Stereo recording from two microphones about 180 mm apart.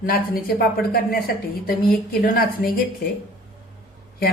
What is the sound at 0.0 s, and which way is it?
A woman's voice, 55° left (ahead or behind).